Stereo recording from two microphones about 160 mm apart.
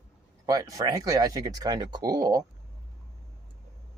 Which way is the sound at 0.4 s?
20° right (ahead or behind).